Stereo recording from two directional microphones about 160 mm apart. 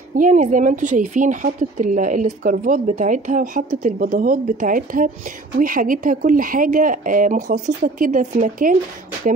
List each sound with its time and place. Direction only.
0.1 s a woman's voice: 55° right (ahead or behind)